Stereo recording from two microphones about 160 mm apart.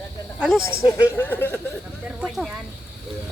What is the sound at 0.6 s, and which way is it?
Speech, 20° left (ahead or behind).